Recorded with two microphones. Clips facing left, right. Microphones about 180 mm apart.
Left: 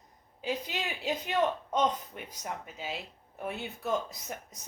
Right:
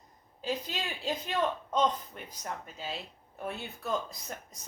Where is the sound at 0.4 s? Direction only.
10° left (ahead or behind).